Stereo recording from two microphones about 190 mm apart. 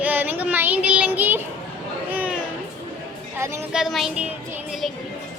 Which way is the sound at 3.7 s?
Centre (ahead or behind).